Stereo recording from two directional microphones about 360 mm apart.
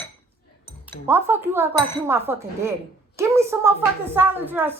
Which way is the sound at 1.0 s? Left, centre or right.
Centre.